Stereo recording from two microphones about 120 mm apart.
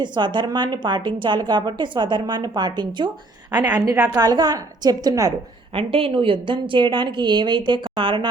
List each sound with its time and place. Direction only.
0.0 s a woman's voice: 40° right (ahead or behind)
5.7 s a woman's voice: 50° right (ahead or behind)